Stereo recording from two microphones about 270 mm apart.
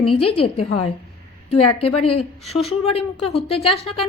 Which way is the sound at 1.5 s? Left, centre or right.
Left.